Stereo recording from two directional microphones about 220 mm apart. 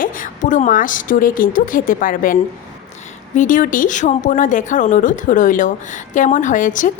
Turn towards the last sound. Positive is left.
turn(degrees=35)  # may be behind; listen again after turning